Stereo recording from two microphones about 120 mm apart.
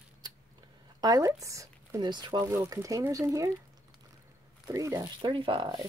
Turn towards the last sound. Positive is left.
turn(degrees=-40)  # may be behind; listen again after turning